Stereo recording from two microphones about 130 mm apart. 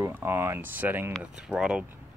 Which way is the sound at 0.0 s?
15° right (ahead or behind).